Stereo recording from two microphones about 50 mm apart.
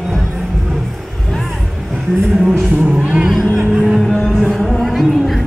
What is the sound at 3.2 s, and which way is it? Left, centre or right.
Vehicle, centre.